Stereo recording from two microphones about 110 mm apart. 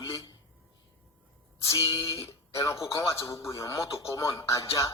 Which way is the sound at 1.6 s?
30° left (ahead or behind).